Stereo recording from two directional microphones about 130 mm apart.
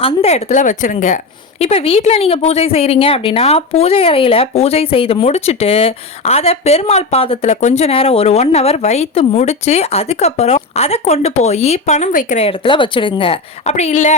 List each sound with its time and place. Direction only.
0.0 s a woman's voice: 50° left (ahead or behind); by 1.6 s 70° left (ahead or behind)
1.6 s speech: 50° left (ahead or behind); by 12.5 s 70° left (ahead or behind)
12.5 s speech: 40° left (ahead or behind); by 14.2 s 65° left (ahead or behind)